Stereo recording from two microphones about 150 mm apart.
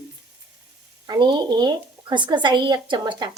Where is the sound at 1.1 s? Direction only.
30° right (ahead or behind).